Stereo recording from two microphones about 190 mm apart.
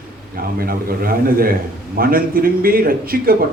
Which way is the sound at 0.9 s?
50° right (ahead or behind).